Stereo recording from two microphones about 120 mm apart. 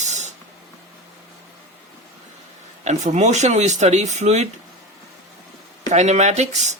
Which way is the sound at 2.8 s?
75° right (ahead or behind).